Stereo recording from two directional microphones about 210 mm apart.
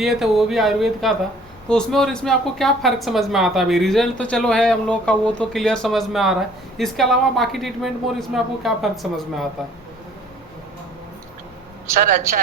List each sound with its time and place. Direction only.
0.0 s speech: centre (ahead or behind)
11.9 s a woman's voice: 45° right (ahead or behind)